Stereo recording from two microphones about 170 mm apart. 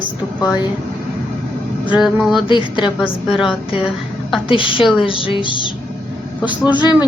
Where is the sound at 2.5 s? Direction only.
30° left (ahead or behind).